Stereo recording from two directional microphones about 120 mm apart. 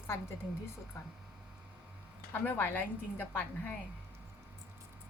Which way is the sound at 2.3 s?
15° left (ahead or behind).